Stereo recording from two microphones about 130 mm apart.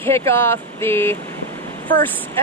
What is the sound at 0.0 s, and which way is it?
Speech, 20° left (ahead or behind).